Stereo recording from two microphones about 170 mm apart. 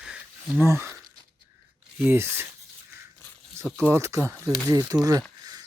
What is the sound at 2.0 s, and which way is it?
Speech, 15° right (ahead or behind).